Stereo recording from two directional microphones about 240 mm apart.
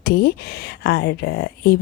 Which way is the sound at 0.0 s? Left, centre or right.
Left.